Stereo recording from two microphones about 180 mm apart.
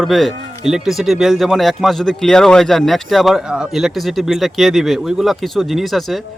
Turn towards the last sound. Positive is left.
turn(degrees=0)  # may be behind; listen again after turning